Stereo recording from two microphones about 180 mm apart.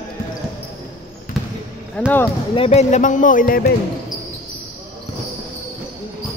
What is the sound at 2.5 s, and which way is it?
A man's voice, 35° left (ahead or behind).